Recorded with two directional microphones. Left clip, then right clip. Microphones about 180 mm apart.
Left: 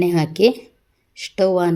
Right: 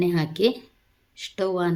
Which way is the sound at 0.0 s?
20° left (ahead or behind).